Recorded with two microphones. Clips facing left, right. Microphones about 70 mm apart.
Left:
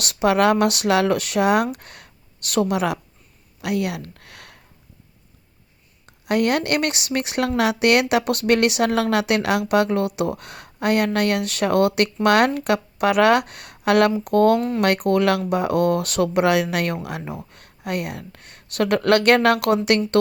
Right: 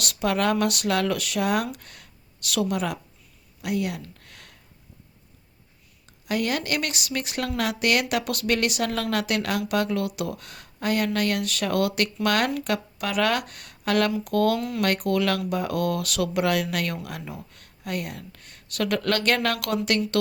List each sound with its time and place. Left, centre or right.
0.0 s speech: left
3.6 s speech: left
6.2 s speech: left
14.3 s speech: left
14.8 s speech: left